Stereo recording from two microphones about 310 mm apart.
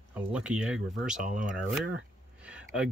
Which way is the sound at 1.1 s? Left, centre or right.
Right.